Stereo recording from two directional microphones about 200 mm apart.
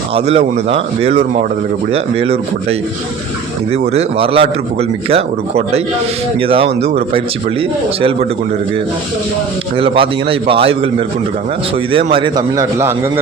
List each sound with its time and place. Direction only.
0.1 s a man's voice: 30° right (ahead or behind)
9.7 s a man's voice: 25° right (ahead or behind)
11.9 s a man's voice: 25° right (ahead or behind)